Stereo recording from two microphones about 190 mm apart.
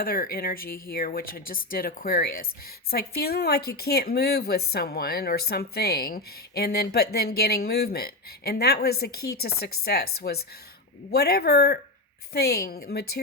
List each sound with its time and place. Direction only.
0.0 s a woman's voice: 50° left (ahead or behind)